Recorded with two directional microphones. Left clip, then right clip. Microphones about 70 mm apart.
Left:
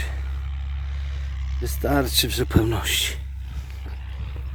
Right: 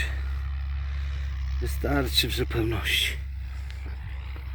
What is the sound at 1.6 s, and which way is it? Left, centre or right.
Speech, left.